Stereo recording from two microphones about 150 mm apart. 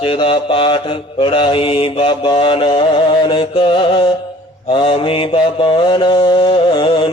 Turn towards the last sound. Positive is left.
turn(degrees=35)  # may be behind; listen again after turning